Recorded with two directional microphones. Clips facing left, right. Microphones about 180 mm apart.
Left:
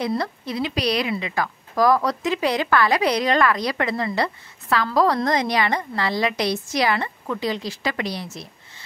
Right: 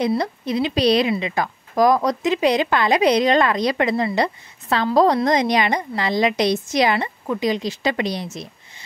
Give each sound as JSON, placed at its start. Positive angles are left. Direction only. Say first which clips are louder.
{"t": 0.2, "sound": "speech", "louder": "right 4 dB", "side_deg": -20}